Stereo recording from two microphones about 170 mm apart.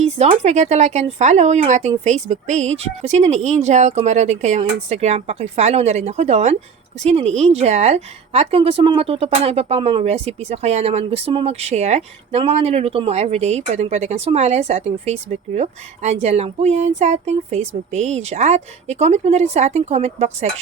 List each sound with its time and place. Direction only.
0.2 s a woman's voice: 40° right (ahead or behind)